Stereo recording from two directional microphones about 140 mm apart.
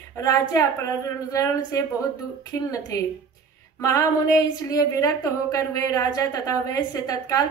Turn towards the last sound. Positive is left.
turn(degrees=25)  # may be behind; listen again after turning